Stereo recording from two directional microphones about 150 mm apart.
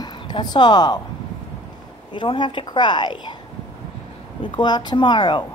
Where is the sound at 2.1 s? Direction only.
30° left (ahead or behind).